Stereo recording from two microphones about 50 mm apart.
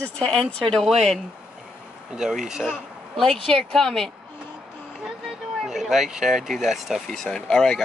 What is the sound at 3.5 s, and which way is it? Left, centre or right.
Speech, centre.